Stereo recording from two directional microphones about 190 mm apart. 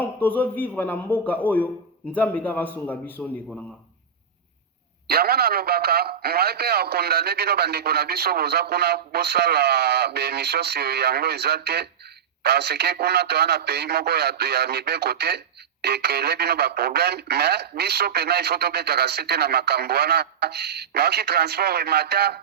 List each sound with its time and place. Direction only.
0.0 s a man's voice: 10° left (ahead or behind)
5.0 s speech: 55° right (ahead or behind)